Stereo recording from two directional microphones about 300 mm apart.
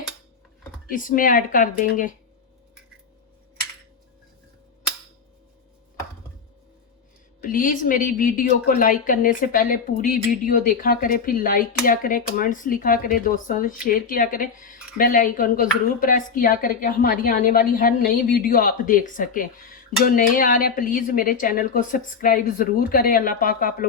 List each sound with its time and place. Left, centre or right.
0.9 s a woman's voice: left
7.4 s a woman's voice: left